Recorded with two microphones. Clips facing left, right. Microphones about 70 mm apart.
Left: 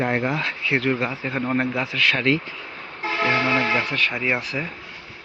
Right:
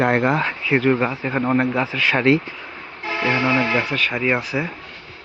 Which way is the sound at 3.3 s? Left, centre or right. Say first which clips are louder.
Right 3 dB; centre.